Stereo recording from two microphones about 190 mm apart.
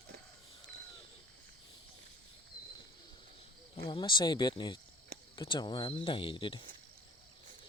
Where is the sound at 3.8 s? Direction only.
25° left (ahead or behind).